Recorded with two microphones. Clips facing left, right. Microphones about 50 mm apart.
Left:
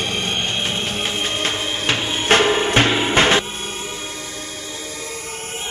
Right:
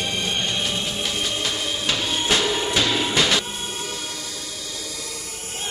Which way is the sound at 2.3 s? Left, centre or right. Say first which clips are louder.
Left 8 dB; left.